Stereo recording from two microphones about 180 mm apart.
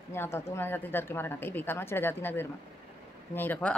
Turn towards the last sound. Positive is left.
turn(degrees=10)  # may be behind; listen again after turning